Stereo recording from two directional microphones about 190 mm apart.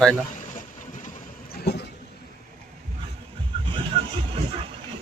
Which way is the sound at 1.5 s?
60° left (ahead or behind).